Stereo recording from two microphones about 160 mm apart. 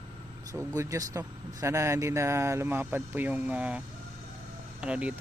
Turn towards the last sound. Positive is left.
turn(degrees=-5)  # may be behind; listen again after turning